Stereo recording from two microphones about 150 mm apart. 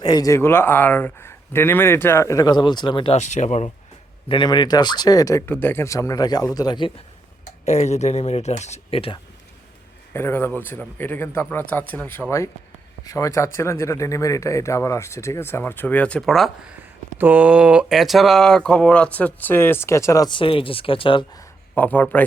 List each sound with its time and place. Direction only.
0.0 s speech: 25° left (ahead or behind)
3.2 s speech: 50° left (ahead or behind)
4.3 s speech: 30° left (ahead or behind)
7.6 s speech: 50° left (ahead or behind)
10.1 s speech: 15° left (ahead or behind)
16.7 s speech: 10° right (ahead or behind); by 21.4 s 30° left (ahead or behind)
21.8 s speech: 10° left (ahead or behind)